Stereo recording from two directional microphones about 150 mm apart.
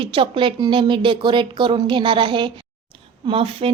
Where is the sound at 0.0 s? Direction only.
35° right (ahead or behind).